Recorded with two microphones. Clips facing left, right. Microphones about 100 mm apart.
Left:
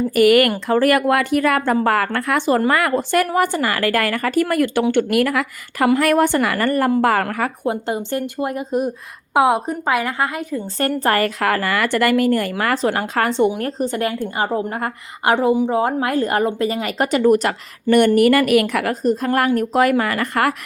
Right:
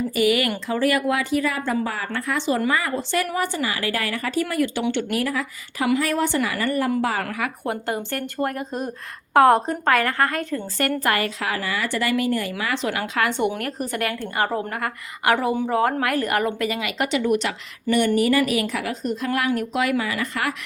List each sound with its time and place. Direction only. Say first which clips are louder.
0.1 s speech: left 9 dB; 55° left (ahead or behind)
5.1 s a woman's voice: left 7 dB; 70° left (ahead or behind); by 7.5 s 50° left (ahead or behind)
7.6 s a woman's voice: left 4 dB; 20° left (ahead or behind)
10.8 s a woman's voice: left 4 dB; 35° left (ahead or behind)
11.2 s speech: left 7 dB; 55° left (ahead or behind)
12.8 s a woman's voice: left 4 dB; 40° left (ahead or behind); by 18.9 s 60° left (ahead or behind)
19.0 s speech: left 6 dB; 45° left (ahead or behind)